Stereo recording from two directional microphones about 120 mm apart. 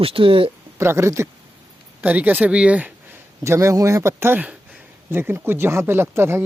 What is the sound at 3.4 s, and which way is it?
Speech, 25° right (ahead or behind).